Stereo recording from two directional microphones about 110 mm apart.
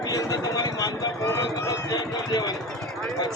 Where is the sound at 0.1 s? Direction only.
35° left (ahead or behind).